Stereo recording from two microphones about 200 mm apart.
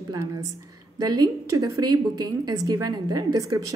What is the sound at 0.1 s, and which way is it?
A woman's voice, 15° right (ahead or behind).